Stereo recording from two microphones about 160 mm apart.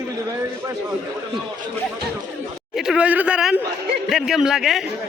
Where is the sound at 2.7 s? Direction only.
5° right (ahead or behind).